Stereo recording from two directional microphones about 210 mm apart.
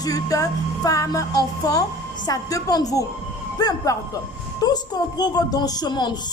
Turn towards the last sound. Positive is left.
turn(degrees=20)  # may be behind; listen again after turning